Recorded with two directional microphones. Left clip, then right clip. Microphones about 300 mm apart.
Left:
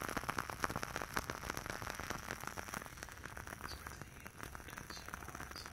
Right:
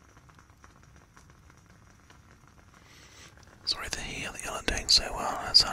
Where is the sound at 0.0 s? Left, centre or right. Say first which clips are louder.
Left 17 dB; left.